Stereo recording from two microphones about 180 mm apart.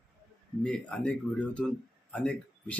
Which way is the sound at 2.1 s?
5° left (ahead or behind).